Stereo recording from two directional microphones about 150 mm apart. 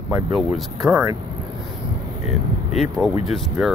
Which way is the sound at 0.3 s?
Centre (ahead or behind).